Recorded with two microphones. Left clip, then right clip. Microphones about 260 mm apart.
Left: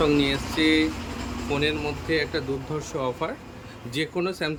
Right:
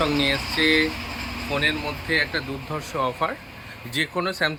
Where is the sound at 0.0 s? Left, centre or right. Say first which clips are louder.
Even; centre.